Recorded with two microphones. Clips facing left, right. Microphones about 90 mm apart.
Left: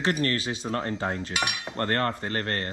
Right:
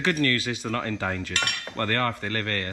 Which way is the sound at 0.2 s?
30° left (ahead or behind).